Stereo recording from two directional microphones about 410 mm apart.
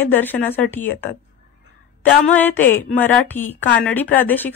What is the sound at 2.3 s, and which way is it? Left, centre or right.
A woman's voice, centre.